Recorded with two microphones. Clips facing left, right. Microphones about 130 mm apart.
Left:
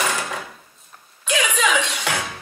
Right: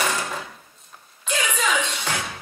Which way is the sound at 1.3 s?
85° left.